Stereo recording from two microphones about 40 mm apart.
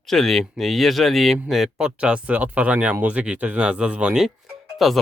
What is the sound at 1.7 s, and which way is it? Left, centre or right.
Speech, right.